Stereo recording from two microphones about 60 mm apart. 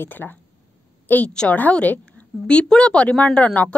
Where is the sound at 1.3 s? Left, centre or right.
Centre.